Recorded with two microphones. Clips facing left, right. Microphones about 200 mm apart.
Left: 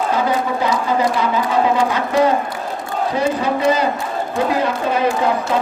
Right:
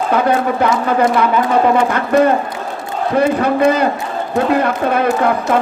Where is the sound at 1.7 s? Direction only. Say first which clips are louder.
Right 4 dB; 55° right (ahead or behind).